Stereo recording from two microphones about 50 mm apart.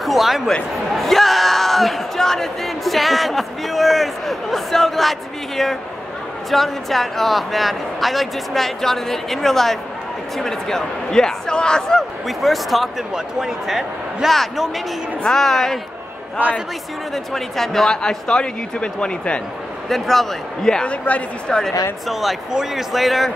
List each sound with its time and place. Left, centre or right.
0.0 s a sound: centre
0.9 s speech: centre
12.3 s speech: centre
16.4 s a man's voice: right
17.1 s speech: centre; by 19.4 s left
19.9 s speech: centre
20.9 s speech: left
21.5 s speech: centre
22.0 s speech: centre